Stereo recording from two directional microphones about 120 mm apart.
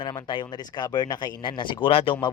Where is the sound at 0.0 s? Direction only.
40° left (ahead or behind).